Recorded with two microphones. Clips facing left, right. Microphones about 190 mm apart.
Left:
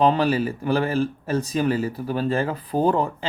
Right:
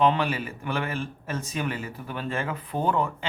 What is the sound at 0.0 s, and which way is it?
Speech, 35° left (ahead or behind).